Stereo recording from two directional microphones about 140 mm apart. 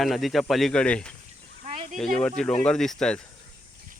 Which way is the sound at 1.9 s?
5° left (ahead or behind).